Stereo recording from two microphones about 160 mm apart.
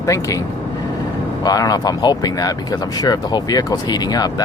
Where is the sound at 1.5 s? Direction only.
25° left (ahead or behind).